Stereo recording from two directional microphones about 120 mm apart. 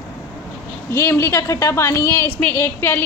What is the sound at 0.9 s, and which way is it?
A woman's voice, 20° left (ahead or behind).